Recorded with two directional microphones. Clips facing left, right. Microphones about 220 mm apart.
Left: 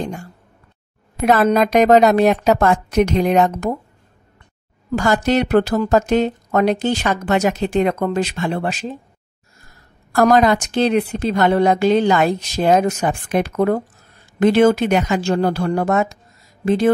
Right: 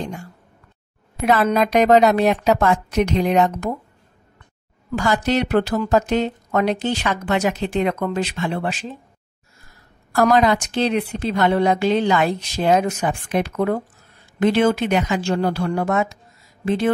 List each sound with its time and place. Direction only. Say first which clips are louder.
1.2 s a woman's voice: left 3 dB; 45° left (ahead or behind)
4.9 s a woman's voice: left 3 dB; 45° left (ahead or behind)
10.1 s a woman's voice: left 2 dB; 45° left (ahead or behind)